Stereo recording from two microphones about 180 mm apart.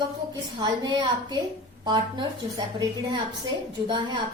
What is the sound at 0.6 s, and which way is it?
A woman's voice, 25° right (ahead or behind).